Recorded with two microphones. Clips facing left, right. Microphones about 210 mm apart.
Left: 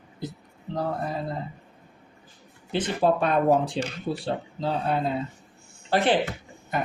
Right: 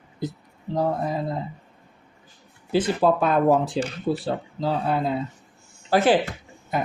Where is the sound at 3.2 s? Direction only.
Centre (ahead or behind).